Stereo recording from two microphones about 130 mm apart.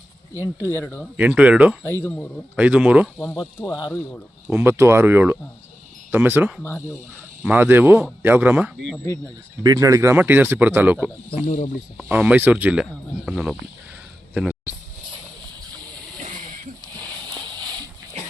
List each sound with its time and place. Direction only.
0.7 s speech: 20° left (ahead or behind)
1.1 s speech: 10° right (ahead or behind)
3.4 s speech: 10° left (ahead or behind)
3.8 s speech: 30° left (ahead or behind)
4.4 s speech: 20° right (ahead or behind)
9.6 s speech: 25° right (ahead or behind)
11.4 s speech: 75° left (ahead or behind)
11.9 s speech: 10° right (ahead or behind)
14.3 s a sound: 10° right (ahead or behind)